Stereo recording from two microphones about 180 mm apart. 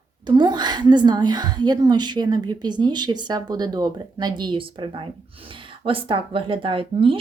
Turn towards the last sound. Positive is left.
turn(degrees=-30)  # may be behind; listen again after turning